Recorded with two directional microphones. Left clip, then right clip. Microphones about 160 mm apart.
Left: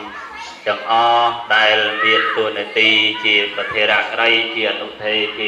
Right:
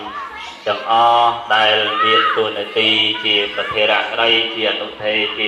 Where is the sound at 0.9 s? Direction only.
20° right (ahead or behind).